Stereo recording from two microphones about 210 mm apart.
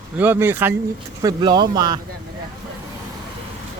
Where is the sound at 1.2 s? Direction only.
20° right (ahead or behind).